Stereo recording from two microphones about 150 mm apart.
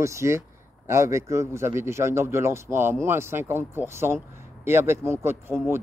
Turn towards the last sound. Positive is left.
turn(degrees=-15)  # may be behind; listen again after turning